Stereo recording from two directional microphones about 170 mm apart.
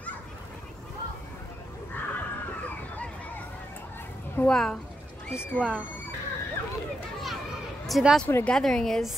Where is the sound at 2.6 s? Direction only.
10° left (ahead or behind).